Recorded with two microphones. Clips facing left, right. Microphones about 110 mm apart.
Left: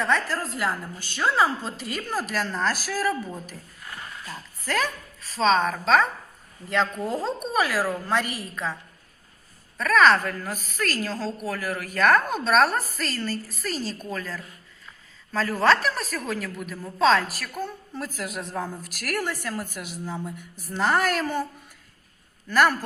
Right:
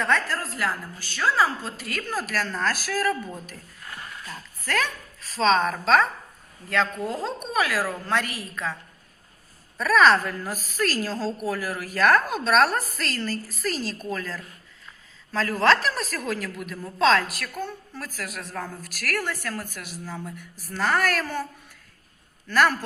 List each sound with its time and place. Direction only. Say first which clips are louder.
0.0 s a woman's voice: even; 15° left (ahead or behind)
5.2 s a woman's voice: even; centre (ahead or behind)
7.1 s a woman's voice: left 2 dB; 15° left (ahead or behind)
9.7 s a woman's voice: even; 5° right (ahead or behind); by 21.4 s 15° left (ahead or behind)
22.4 s a woman's voice: left 1 dB; 10° left (ahead or behind)